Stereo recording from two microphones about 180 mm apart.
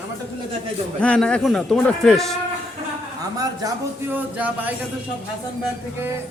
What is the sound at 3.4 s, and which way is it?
Speech, 20° right (ahead or behind).